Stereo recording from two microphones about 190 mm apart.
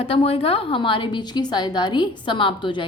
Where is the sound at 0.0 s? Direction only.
30° left (ahead or behind).